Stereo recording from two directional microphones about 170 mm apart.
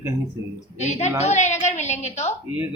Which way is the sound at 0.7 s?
40° left (ahead or behind).